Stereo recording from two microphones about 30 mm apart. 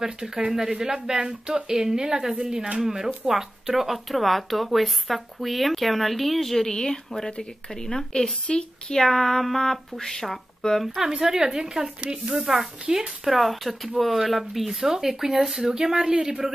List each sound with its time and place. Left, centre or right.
0.0 s speech: right; by 6.7 s centre
6.7 s speech: centre
8.5 s speech: left
8.9 s speech: centre
11.0 s speech: centre; by 12.4 s right
12.4 s speech: centre
12.9 s speech: right
13.2 s speech: centre
15.7 s speech: right